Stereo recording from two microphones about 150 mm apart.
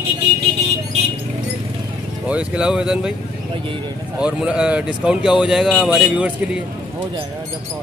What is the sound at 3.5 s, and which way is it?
Speech, 35° right (ahead or behind).